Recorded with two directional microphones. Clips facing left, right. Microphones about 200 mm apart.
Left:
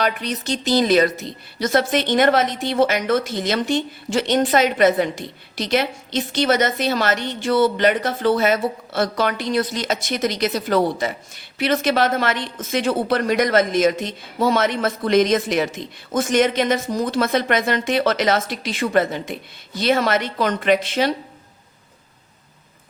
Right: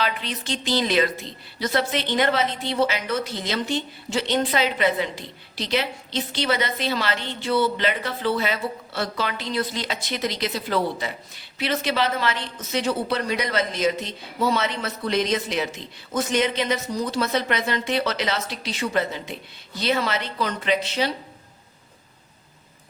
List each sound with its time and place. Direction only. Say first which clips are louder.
0.0 s speech: left 5 dB; 45° left (ahead or behind)